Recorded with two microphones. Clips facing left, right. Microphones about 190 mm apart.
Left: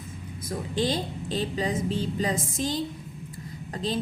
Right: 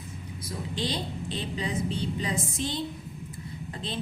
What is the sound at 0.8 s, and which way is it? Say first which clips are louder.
A woman's voice: left 5 dB; 45° left (ahead or behind).